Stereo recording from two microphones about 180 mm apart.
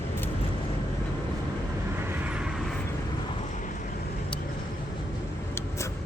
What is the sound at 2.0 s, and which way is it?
Vehicle, 10° right (ahead or behind).